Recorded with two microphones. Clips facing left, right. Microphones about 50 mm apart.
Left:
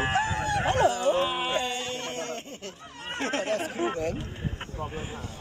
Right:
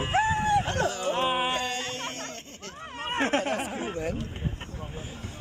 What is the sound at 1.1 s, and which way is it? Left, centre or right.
Speech, right.